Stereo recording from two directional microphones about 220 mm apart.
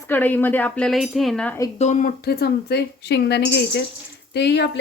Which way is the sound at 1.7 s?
30° left (ahead or behind).